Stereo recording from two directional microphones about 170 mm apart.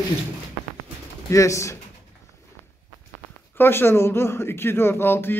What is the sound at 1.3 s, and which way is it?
Speech, 20° left (ahead or behind).